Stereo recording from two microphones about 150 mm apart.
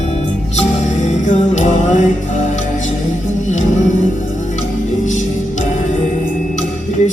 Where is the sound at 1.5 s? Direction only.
55° left (ahead or behind).